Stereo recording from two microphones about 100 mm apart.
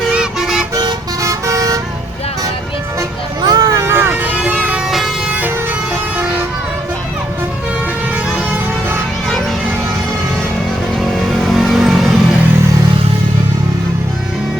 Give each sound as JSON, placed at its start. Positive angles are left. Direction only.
{"t": 0.1, "sound": "vehicle", "side_deg": -5}
{"t": 1.2, "sound": "vehicle", "side_deg": -35}
{"t": 3.4, "sound": "vehicle", "side_deg": -45}
{"t": 3.9, "sound": "vehicle", "side_deg": -20}
{"t": 4.9, "sound": "music", "side_deg": 0}
{"t": 10.9, "sound": "vehicle", "side_deg": 0}